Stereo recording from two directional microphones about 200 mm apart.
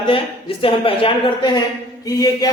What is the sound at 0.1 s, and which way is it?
A man's voice, 25° left (ahead or behind).